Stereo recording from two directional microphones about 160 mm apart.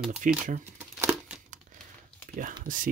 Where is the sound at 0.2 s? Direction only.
55° right (ahead or behind).